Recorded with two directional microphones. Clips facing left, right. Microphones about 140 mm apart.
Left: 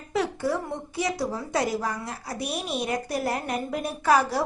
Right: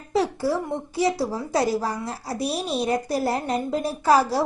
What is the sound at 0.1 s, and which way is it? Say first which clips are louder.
A woman's voice: right 3 dB; 30° right (ahead or behind).